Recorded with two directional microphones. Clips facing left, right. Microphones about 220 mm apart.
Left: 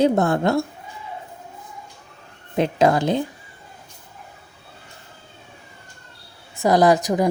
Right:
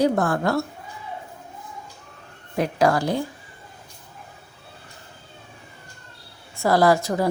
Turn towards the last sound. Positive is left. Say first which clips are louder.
# left 2 dB
turn(degrees=15)  # may be behind; listen again after turning